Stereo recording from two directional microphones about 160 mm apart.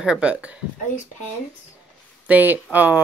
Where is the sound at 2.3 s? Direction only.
10° right (ahead or behind).